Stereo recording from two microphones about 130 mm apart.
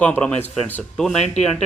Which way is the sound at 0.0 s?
10° left (ahead or behind).